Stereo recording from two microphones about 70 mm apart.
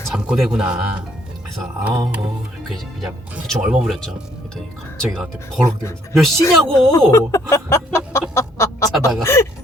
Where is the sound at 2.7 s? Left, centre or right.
Centre.